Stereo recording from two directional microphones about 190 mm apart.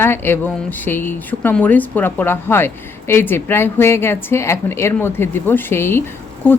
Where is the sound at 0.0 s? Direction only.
10° left (ahead or behind).